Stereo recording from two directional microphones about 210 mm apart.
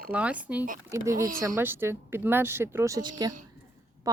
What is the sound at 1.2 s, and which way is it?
Speech, 40° right (ahead or behind).